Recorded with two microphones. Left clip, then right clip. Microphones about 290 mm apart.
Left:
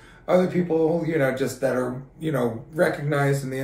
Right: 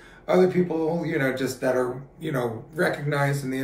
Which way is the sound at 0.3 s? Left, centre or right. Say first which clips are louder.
Even; centre.